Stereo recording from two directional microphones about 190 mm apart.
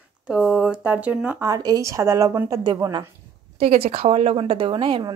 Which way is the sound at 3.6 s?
30° right (ahead or behind).